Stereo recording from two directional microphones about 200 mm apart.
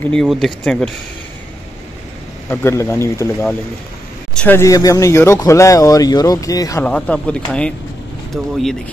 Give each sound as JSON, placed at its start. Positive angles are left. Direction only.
{"t": 0.0, "sound": "speech", "side_deg": 5}
{"t": 2.5, "sound": "speech", "side_deg": 15}
{"t": 6.8, "sound": "speech", "side_deg": 5}